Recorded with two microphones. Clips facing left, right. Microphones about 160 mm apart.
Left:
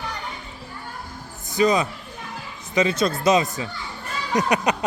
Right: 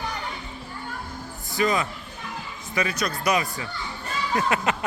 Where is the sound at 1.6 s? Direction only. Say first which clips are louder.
Left 4 dB; 20° left (ahead or behind).